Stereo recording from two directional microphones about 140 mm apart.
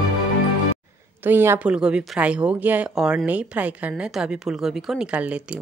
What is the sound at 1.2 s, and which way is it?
Speech, 15° right (ahead or behind).